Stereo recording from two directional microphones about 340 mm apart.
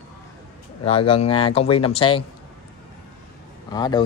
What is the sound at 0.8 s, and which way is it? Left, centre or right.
Speech, centre.